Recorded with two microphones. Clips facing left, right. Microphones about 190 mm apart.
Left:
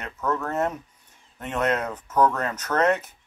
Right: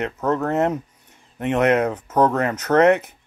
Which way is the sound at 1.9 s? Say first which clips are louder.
Right 3 dB; 35° right (ahead or behind).